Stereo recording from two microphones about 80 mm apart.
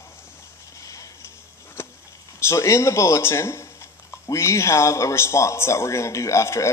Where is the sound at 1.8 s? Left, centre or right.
Left.